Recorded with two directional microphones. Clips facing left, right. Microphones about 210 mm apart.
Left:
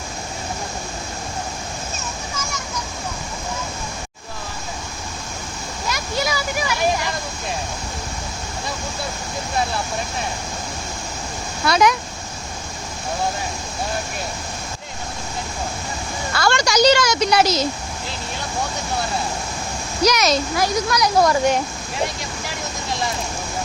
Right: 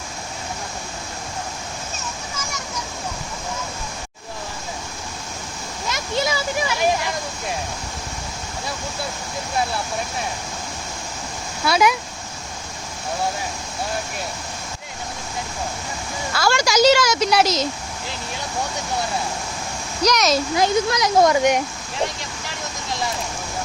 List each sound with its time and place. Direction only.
5.9 s a sound: 25° right (ahead or behind)
11.6 s a woman's voice: 5° right (ahead or behind)
16.3 s a woman's voice: 5° right (ahead or behind)
20.0 s a woman's voice: 5° left (ahead or behind)
20.6 s a child's voice: 25° right (ahead or behind)
21.9 s vehicle: 10° left (ahead or behind)